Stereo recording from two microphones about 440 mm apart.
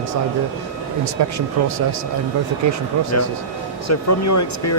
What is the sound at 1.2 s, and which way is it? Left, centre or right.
Speech, right.